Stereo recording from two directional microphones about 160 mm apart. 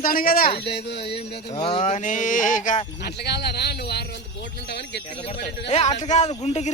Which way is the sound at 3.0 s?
90° left.